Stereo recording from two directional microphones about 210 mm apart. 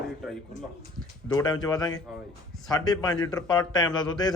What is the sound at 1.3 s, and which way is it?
A man's voice, 20° left (ahead or behind).